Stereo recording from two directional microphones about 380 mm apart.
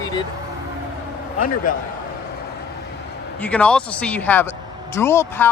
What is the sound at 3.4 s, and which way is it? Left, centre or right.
Speech, centre.